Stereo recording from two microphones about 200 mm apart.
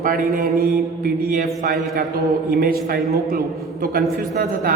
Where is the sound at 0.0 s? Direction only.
45° right (ahead or behind).